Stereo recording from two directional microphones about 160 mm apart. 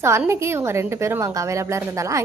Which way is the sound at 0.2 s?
15° right (ahead or behind).